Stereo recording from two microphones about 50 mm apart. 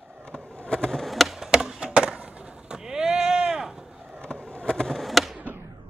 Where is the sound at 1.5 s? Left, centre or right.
Centre.